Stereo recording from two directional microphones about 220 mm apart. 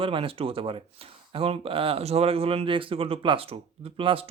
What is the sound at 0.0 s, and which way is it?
Speech, 25° right (ahead or behind).